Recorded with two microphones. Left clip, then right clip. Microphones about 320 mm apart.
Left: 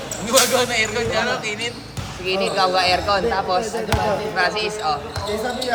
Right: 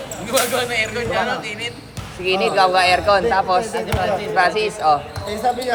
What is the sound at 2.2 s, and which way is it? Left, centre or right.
A man's voice, right.